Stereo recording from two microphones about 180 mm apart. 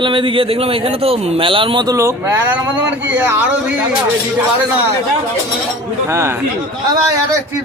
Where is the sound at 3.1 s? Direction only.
10° right (ahead or behind).